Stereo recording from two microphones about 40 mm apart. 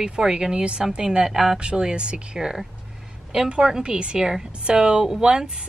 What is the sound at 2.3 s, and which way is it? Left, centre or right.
A woman's voice, centre.